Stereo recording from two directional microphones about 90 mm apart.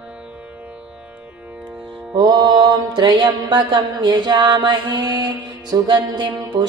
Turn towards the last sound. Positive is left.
turn(degrees=-50)  # may be behind; listen again after turning